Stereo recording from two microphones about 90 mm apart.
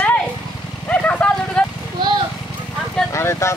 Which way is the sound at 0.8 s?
15° left (ahead or behind).